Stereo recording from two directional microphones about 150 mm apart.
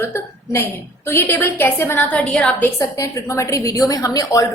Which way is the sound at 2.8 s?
20° left (ahead or behind).